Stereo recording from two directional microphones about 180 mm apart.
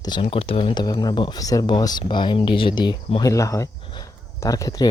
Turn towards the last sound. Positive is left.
turn(degrees=20)  # may be behind; listen again after turning